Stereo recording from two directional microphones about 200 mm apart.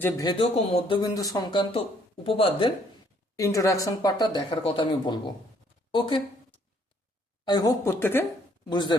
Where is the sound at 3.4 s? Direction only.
15° left (ahead or behind).